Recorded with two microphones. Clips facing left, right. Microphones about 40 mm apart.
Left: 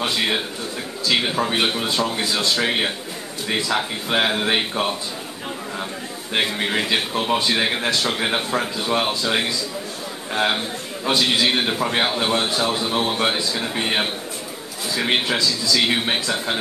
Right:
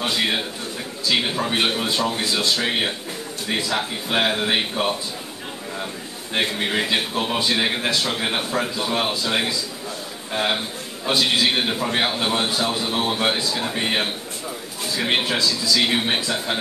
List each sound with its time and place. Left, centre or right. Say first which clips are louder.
1.2 s a man's voice: left 1 dB; centre
6.3 s a man's voice: left 1 dB; centre
11.1 s a man's voice: even; centre
11.8 s a man's voice: left 2 dB; centre
12.1 s a man's voice: left 1 dB; centre
12.6 s a man's voice: left 1 dB; centre
13.1 s a man's voice: even; centre